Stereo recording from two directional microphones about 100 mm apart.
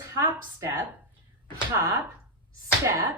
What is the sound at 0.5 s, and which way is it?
Speech, 30° right (ahead or behind).